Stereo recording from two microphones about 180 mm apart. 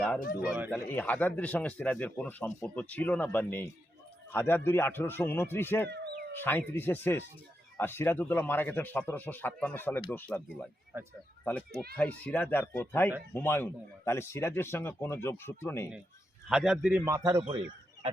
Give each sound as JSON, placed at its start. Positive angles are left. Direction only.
{"t": 0.4, "sound": "a man's voice", "side_deg": -10}
{"t": 0.7, "sound": "speech", "side_deg": 10}
{"t": 10.9, "sound": "a man's voice", "side_deg": -10}
{"t": 11.9, "sound": "speech", "side_deg": 10}
{"t": 16.5, "sound": "a man's voice", "side_deg": -5}
{"t": 17.3, "sound": "a man's voice", "side_deg": -25}